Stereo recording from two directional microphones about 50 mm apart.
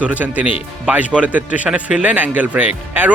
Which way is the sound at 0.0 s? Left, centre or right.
Right.